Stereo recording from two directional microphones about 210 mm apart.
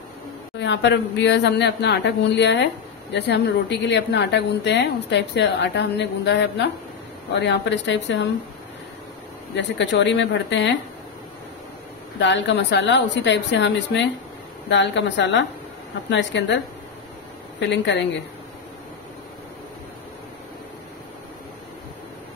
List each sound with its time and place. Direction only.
0.6 s speech: 55° left (ahead or behind)
9.6 s speech: 60° left (ahead or behind)
12.2 s speech: 60° left (ahead or behind)
17.6 s speech: 55° left (ahead or behind)